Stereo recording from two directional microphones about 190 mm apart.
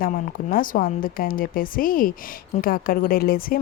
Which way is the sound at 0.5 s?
45° left (ahead or behind).